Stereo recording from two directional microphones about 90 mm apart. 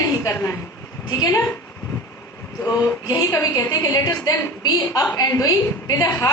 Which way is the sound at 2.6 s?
35° left (ahead or behind).